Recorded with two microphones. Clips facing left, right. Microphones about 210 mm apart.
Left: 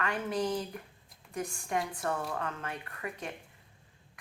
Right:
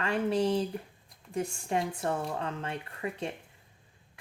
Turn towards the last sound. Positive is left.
turn(degrees=-25)  # may be behind; listen again after turning